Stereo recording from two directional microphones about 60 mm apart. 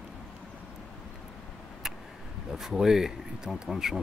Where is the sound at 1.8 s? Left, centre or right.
Centre.